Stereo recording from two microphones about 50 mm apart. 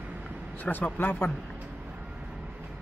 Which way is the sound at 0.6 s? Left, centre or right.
Left.